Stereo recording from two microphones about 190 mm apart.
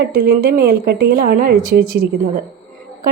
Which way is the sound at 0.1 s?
50° right (ahead or behind).